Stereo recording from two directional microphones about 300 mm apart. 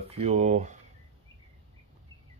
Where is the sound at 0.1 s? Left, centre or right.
Right.